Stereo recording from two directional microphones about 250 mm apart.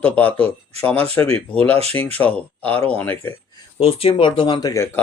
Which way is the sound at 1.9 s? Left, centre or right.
Centre.